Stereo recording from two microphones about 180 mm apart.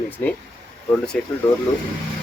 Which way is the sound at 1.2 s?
5° left (ahead or behind).